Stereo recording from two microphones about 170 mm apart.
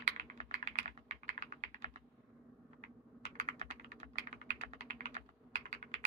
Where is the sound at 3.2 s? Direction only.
45° right (ahead or behind).